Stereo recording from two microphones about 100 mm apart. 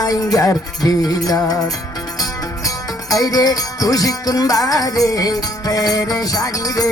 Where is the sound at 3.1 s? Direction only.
40° left (ahead or behind).